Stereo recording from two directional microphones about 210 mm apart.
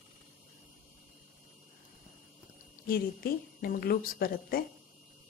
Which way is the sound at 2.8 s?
45° left (ahead or behind).